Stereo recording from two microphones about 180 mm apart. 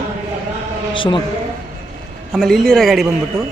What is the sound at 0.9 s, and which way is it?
Speech, 30° left (ahead or behind).